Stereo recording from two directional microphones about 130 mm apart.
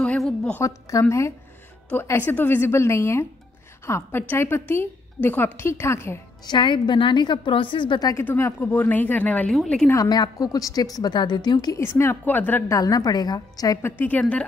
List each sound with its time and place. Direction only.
0.0 s a sound: 10° left (ahead or behind)
0.6 s a woman's voice: 25° left (ahead or behind)
6.4 s a woman's voice: 35° left (ahead or behind)
8.1 s a woman's voice: 20° left (ahead or behind)
9.8 s a woman's voice: 30° left (ahead or behind)
11.8 s a woman's voice: 20° left (ahead or behind)
13.8 s speech: 15° left (ahead or behind)